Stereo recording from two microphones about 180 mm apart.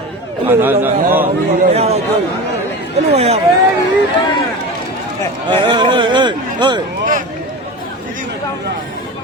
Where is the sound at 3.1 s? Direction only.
35° right (ahead or behind).